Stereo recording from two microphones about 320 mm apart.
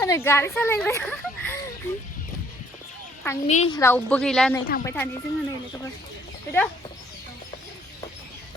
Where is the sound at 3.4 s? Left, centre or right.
Centre.